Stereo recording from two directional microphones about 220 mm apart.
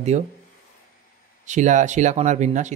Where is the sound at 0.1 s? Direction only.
30° right (ahead or behind).